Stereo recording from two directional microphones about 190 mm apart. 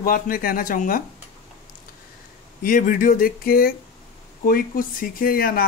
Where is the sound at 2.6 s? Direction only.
45° left (ahead or behind).